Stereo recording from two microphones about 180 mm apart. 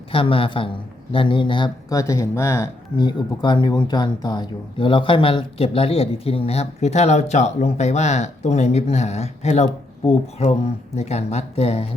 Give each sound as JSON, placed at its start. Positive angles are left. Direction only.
{"t": 0.1, "sound": "a woman's voice", "side_deg": 30}